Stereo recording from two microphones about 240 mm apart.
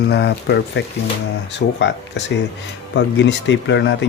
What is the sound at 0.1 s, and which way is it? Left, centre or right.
Speech, left.